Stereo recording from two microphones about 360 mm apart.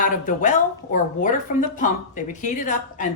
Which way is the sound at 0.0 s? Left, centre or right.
Left.